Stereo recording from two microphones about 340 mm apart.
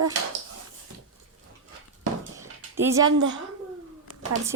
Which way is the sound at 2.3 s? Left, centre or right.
Centre.